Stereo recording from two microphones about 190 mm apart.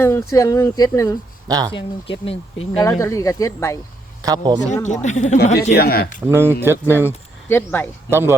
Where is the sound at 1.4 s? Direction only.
20° right (ahead or behind).